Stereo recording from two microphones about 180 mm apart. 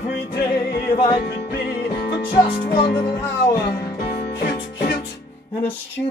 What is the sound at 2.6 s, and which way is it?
Music, 60° left (ahead or behind).